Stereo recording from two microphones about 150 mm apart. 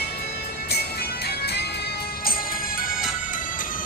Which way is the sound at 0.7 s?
90° left.